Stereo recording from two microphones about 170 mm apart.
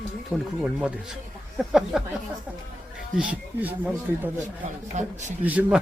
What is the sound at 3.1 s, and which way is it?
Speech, 5° right (ahead or behind).